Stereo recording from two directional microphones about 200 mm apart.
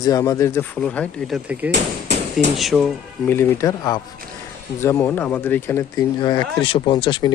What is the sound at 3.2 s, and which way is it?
Speech, 10° left (ahead or behind).